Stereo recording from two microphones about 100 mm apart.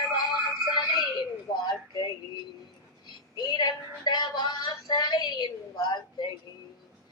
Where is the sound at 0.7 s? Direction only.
45° left (ahead or behind).